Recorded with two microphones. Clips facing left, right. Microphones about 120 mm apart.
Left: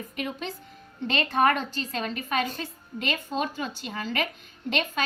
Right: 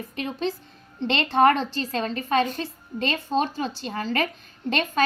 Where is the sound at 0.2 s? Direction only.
30° right (ahead or behind).